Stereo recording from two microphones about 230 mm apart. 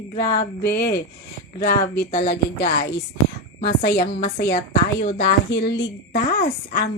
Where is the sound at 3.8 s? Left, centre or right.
Left.